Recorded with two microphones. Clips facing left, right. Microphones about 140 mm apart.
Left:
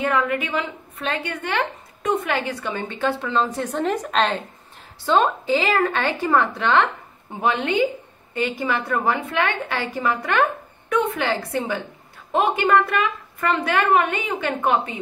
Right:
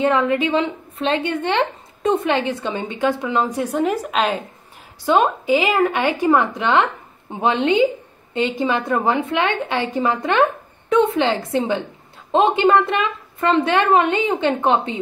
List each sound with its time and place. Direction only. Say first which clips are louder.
0.0 s speech: right 5 dB; 25° right (ahead or behind); by 4.5 s 5° right (ahead or behind)
5.0 s speech: right 2 dB; 15° right (ahead or behind)